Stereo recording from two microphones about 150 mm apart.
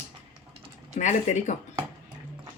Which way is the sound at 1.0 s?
55° left (ahead or behind).